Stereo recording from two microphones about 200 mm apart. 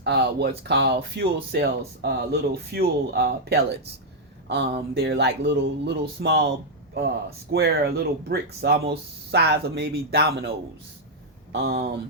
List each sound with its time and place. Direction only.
0.0 s speech: 55° right (ahead or behind)
11.5 s speech: 55° right (ahead or behind)